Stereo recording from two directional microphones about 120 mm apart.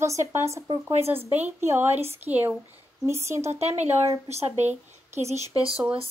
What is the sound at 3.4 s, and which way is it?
Speech, 65° right (ahead or behind).